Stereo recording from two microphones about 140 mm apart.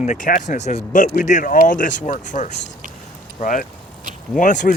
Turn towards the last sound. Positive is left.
turn(degrees=65)  # may be behind; listen again after turning